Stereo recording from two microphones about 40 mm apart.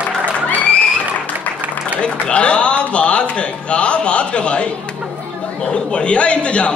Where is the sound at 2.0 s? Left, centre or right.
Left.